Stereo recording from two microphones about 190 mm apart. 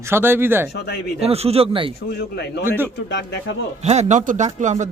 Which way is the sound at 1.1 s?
30° right (ahead or behind).